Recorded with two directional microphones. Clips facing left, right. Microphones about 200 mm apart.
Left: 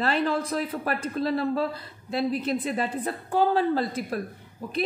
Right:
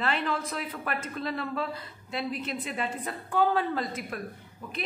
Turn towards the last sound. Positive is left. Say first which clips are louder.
# left 5 dB
turn(degrees=35)  # may be behind; listen again after turning